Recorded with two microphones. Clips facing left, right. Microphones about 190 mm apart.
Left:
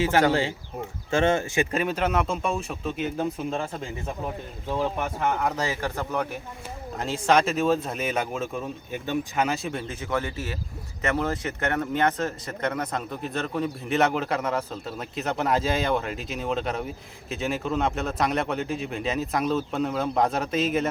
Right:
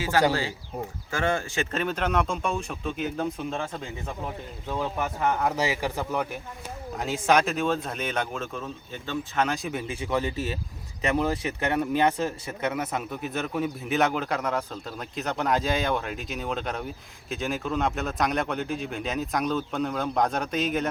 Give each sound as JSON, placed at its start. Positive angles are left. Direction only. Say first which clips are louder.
{"t": 0.3, "sound": "speech", "louder": "left 3 dB", "side_deg": 20}